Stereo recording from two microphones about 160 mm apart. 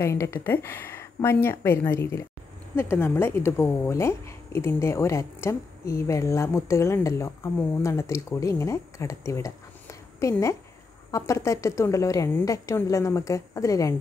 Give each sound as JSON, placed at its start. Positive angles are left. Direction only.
{"t": 0.0, "sound": "a woman's voice", "side_deg": 15}